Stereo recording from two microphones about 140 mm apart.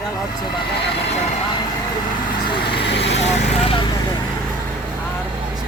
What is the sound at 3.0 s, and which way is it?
Speech, 45° left (ahead or behind).